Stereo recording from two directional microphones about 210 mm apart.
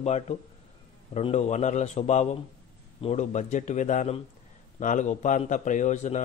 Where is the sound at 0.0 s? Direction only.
30° left (ahead or behind).